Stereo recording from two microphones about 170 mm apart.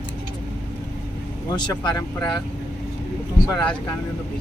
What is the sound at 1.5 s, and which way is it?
Speech, 25° left (ahead or behind).